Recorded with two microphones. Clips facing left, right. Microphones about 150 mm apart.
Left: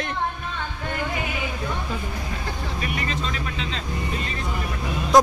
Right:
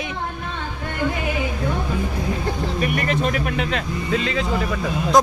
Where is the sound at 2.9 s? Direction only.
60° right (ahead or behind); by 4.6 s 90° right.